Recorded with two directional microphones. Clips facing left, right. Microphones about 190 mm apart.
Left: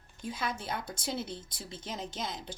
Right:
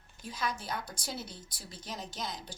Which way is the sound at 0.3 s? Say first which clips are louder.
Left 1 dB; 25° left (ahead or behind).